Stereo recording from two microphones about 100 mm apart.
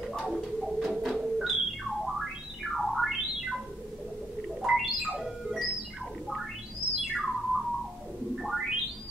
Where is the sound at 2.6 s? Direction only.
Centre (ahead or behind).